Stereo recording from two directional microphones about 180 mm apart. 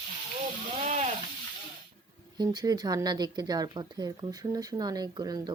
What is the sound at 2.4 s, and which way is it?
A woman's voice, 20° right (ahead or behind).